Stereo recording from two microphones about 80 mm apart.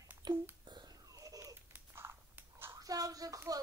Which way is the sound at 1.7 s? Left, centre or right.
Right.